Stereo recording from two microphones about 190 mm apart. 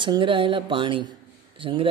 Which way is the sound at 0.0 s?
25° right (ahead or behind).